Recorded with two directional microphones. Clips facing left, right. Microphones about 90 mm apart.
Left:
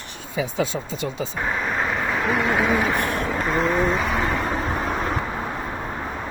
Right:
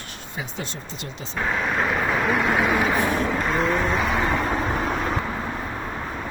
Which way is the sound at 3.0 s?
60° left (ahead or behind).